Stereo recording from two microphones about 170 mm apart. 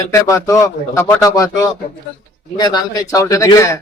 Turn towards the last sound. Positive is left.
turn(degrees=15)  # may be behind; listen again after turning